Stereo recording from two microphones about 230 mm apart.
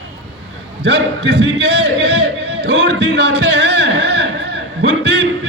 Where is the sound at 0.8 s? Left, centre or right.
Right.